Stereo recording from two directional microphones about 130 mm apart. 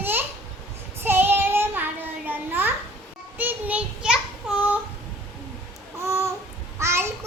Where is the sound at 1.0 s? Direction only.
15° right (ahead or behind).